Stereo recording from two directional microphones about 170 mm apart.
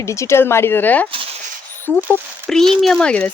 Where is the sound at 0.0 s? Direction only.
15° left (ahead or behind).